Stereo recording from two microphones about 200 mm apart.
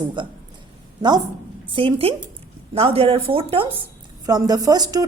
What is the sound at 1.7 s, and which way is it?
A woman's voice, 30° right (ahead or behind).